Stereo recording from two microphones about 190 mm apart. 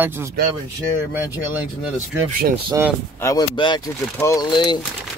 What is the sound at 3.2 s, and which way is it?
Speech, 20° left (ahead or behind).